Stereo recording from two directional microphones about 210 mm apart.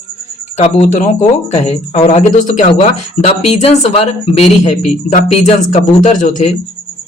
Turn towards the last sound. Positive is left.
turn(degrees=35)  # may be behind; listen again after turning